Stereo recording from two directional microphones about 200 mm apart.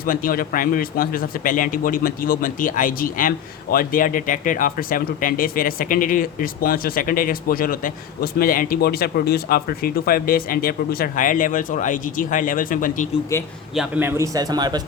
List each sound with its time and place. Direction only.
0.0 s speech: 45° left (ahead or behind)
13.3 s a man's voice: 15° left (ahead or behind)
13.7 s a man's voice: 10° right (ahead or behind)